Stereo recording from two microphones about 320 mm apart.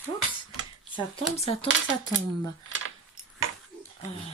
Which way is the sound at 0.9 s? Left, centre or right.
Centre.